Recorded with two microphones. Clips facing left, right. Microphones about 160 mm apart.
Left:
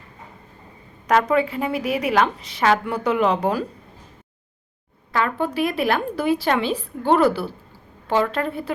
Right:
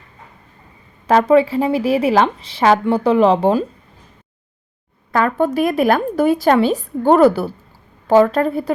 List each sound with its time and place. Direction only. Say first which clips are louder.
1.0 s a woman's voice: right 6 dB; 30° right (ahead or behind)
5.1 s a woman's voice: right 6 dB; 45° right (ahead or behind)